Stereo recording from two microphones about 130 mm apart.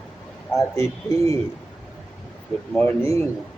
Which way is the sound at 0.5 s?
25° left (ahead or behind).